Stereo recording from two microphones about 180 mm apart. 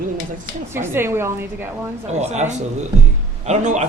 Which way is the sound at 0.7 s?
15° right (ahead or behind).